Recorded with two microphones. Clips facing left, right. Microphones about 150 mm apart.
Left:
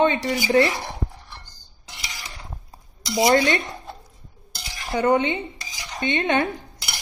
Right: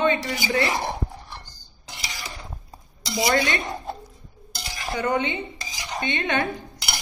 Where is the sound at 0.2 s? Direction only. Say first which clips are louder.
Left 6 dB; 30° left (ahead or behind).